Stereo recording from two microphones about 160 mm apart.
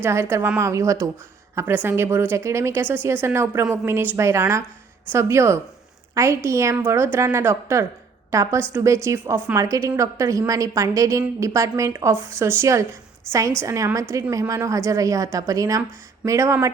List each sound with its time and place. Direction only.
0.0 s a woman's voice: 15° right (ahead or behind)